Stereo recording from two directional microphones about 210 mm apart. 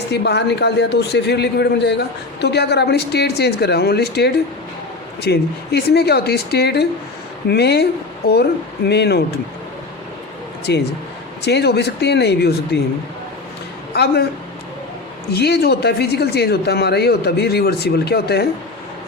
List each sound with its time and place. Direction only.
0.1 s a man's voice: 55° left (ahead or behind)
8.9 s a man's voice: 50° left (ahead or behind)
10.7 s a man's voice: 55° left (ahead or behind)
13.9 s a man's voice: 50° left (ahead or behind)
15.3 s a man's voice: 50° left (ahead or behind)